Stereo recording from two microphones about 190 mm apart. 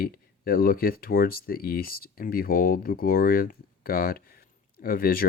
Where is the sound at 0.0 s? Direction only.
50° left (ahead or behind).